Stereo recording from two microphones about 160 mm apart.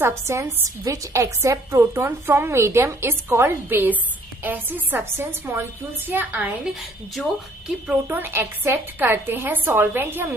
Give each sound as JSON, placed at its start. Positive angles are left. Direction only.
{"t": 0.0, "sound": "a woman's voice", "side_deg": -15}
{"t": 7.9, "sound": "a woman's voice", "side_deg": -10}